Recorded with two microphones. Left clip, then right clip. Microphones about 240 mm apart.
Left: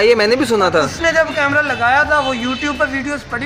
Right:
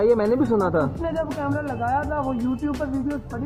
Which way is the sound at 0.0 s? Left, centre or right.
Centre.